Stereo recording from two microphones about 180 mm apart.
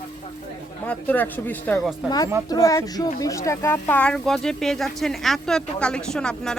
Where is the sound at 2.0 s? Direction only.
20° left (ahead or behind).